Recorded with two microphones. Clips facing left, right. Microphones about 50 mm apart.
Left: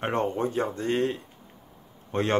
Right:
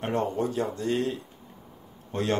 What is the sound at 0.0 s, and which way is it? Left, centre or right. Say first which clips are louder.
A man's voice: left 1 dB; left.